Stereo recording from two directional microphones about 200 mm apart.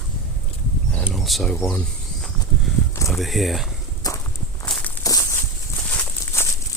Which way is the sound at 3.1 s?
Centre (ahead or behind).